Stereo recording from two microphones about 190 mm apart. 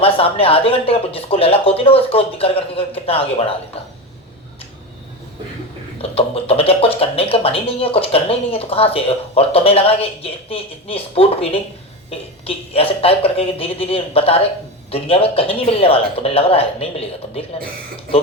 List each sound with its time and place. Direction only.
0.0 s speech: 30° left (ahead or behind)
6.0 s speech: 30° left (ahead or behind)